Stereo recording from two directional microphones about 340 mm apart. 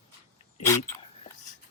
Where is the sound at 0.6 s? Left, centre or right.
Centre.